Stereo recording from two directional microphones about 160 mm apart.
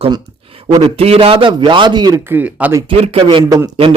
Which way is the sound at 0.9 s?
40° right (ahead or behind).